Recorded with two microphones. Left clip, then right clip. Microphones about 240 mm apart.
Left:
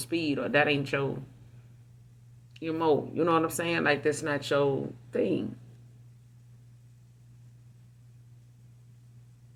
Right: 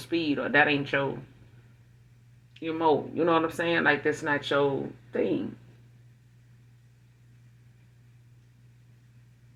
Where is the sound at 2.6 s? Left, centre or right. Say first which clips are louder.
Right 2 dB; left.